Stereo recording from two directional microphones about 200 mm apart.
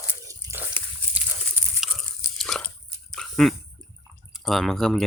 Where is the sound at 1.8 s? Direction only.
Centre (ahead or behind).